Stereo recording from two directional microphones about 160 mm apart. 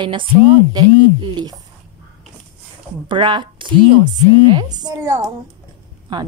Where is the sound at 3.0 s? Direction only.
30° right (ahead or behind).